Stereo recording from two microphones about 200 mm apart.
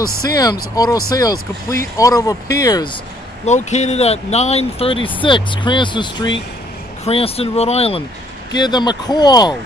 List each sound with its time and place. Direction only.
0.3 s speech: 20° left (ahead or behind)
3.4 s speech: 35° left (ahead or behind)